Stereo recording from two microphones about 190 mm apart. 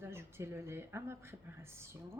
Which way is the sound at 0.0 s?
15° right (ahead or behind).